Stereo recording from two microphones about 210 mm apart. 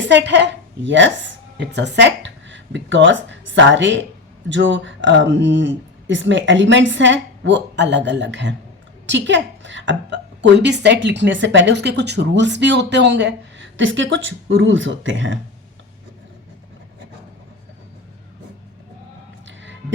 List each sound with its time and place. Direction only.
0.1 s a woman's voice: 55° right (ahead or behind)